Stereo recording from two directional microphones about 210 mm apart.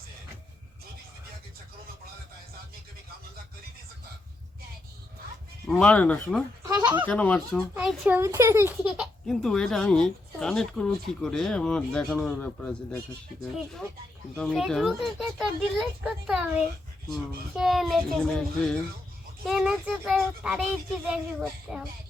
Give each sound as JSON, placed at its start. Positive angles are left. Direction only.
{"t": 5.6, "sound": "a child's voice", "side_deg": 5}
{"t": 6.6, "sound": "speech", "side_deg": -15}
{"t": 7.1, "sound": "a child's voice", "side_deg": 5}
{"t": 7.8, "sound": "a child's voice", "side_deg": -10}
{"t": 14.3, "sound": "a child's voice", "side_deg": 0}